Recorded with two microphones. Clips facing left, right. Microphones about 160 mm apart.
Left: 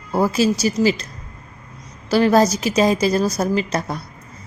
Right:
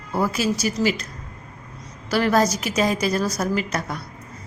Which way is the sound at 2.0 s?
25° left (ahead or behind).